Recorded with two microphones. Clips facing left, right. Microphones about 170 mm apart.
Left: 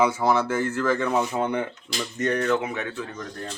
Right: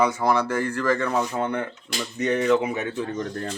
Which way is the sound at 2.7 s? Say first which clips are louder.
Right 3 dB; 20° right (ahead or behind).